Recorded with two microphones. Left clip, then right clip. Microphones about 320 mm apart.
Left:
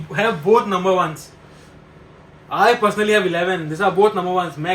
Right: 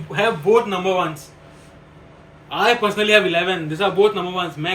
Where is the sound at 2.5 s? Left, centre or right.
Centre.